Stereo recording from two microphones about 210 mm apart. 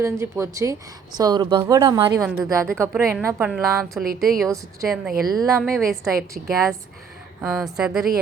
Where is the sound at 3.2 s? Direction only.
5° right (ahead or behind).